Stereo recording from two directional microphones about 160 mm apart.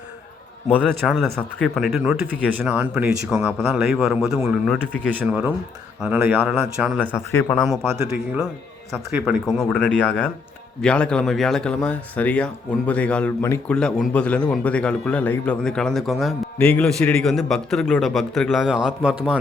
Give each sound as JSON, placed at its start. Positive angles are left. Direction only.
{"t": 0.9, "sound": "speech", "side_deg": 0}
{"t": 7.0, "sound": "speech", "side_deg": 15}
{"t": 7.5, "sound": "speech", "side_deg": 5}
{"t": 9.5, "sound": "speech", "side_deg": 5}